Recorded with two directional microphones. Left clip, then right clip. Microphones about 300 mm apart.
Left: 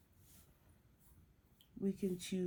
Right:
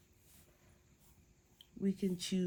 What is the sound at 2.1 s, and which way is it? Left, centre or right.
Speech, right.